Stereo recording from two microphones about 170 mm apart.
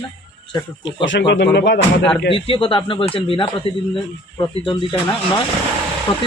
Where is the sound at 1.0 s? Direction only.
90° left.